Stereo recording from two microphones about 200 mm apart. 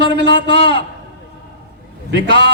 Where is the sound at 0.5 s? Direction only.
25° left (ahead or behind).